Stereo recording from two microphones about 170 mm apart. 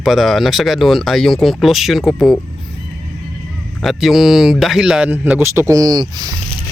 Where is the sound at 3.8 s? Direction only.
Centre (ahead or behind).